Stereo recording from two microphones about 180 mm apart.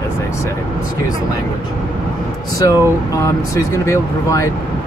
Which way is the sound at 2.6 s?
20° left (ahead or behind).